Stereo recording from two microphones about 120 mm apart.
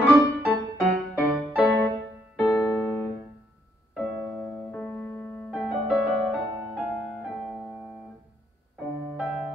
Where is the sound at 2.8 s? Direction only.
15° left (ahead or behind).